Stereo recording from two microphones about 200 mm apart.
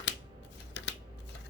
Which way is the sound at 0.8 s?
60° left (ahead or behind).